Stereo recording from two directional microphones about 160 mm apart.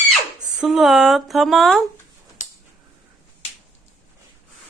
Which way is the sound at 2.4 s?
50° left (ahead or behind).